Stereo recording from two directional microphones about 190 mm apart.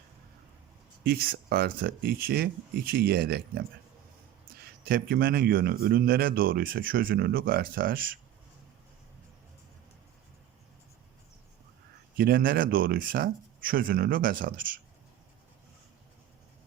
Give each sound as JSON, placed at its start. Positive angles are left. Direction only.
{"t": 1.0, "sound": "speech", "side_deg": -55}
{"t": 4.9, "sound": "speech", "side_deg": -55}
{"t": 12.1, "sound": "speech", "side_deg": -55}